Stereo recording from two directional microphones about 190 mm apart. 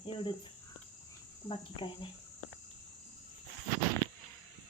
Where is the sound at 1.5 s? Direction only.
25° left (ahead or behind).